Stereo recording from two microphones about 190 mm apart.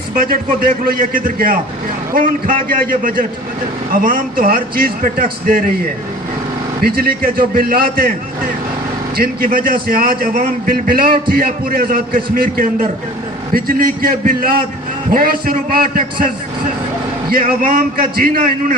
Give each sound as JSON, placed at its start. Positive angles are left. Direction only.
{"t": 0.2, "sound": "a man's voice", "side_deg": -50}
{"t": 6.8, "sound": "a man's voice", "side_deg": -50}
{"t": 9.1, "sound": "a man's voice", "side_deg": -50}
{"t": 17.3, "sound": "a man's voice", "side_deg": -45}